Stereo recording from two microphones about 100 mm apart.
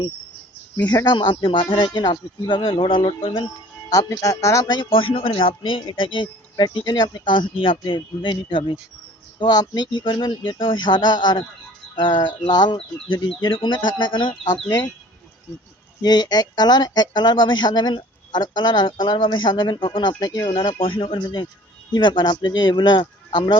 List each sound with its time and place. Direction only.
0.9 s speech: 45° left (ahead or behind); by 3.4 s 65° left (ahead or behind)
3.8 s speech: 35° left (ahead or behind)
4.7 s speech: 55° left (ahead or behind)
16.0 s speech: 45° left (ahead or behind)
20.5 s speech: 60° left (ahead or behind)